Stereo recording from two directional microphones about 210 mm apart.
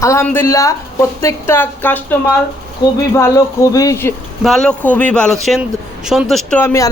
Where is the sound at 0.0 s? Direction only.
15° left (ahead or behind).